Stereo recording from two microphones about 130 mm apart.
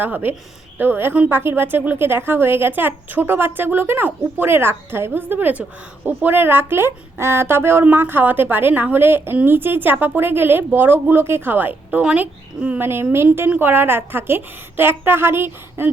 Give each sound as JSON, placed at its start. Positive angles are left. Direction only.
{"t": 0.0, "sound": "a woman's voice", "side_deg": -15}